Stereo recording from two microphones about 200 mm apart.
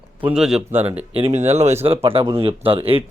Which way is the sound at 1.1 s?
30° right (ahead or behind).